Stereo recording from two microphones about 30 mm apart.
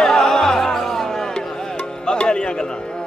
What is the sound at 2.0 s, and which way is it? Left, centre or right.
Music, left.